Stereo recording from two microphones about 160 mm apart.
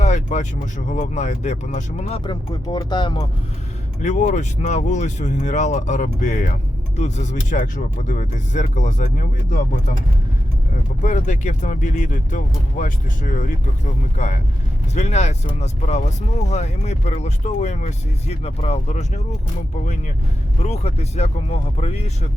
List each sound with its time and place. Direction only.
0.0 s speech: 50° left (ahead or behind)
2.2 s speech: 25° left (ahead or behind)
4.0 s speech: 50° left (ahead or behind)
11.0 s speech: 50° left (ahead or behind)
20.6 s speech: 40° left (ahead or behind)